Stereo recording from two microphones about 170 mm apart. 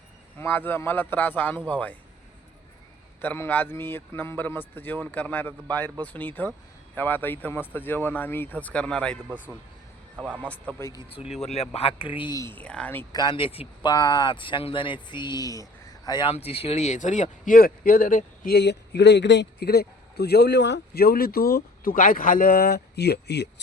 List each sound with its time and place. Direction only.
0.3 s speech: 10° left (ahead or behind)
3.2 s speech: 10° left (ahead or behind)
10.2 s a man's voice: 10° right (ahead or behind)
10.4 s speech: 10° left (ahead or behind)
11.4 s speech: 40° left (ahead or behind)
12.4 s speech: 10° left (ahead or behind)
13.1 s speech: 30° left (ahead or behind)
16.3 s speech: 35° left (ahead or behind); by 18.5 s 55° left (ahead or behind)
18.5 s a man's voice: 80° left